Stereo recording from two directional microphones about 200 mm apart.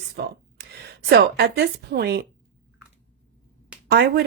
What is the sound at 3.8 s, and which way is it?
Speech, 55° right (ahead or behind).